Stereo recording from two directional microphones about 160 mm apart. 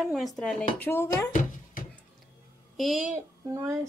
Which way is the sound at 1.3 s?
55° left (ahead or behind).